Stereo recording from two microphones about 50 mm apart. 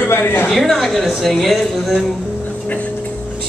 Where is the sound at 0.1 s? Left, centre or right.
Left.